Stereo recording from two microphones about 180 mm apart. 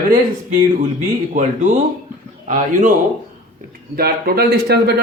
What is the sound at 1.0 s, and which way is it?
Speech, 45° right (ahead or behind).